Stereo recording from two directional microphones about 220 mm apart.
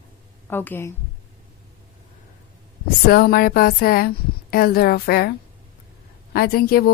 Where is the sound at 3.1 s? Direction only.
45° left (ahead or behind).